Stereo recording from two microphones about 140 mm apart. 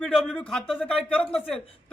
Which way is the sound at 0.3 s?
5° left (ahead or behind).